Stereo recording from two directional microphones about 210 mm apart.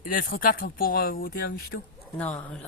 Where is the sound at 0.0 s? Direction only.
40° left (ahead or behind).